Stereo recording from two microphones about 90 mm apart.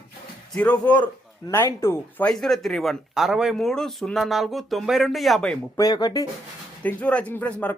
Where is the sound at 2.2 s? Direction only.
5° left (ahead or behind).